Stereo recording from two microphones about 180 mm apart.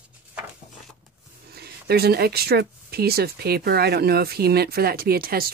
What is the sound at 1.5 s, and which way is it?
Speech, 60° right (ahead or behind).